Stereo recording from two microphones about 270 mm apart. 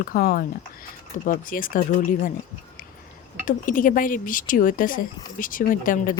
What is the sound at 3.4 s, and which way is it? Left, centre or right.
A woman's voice, left.